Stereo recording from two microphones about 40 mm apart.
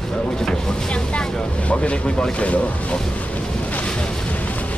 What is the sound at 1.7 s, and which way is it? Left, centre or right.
Speech, left.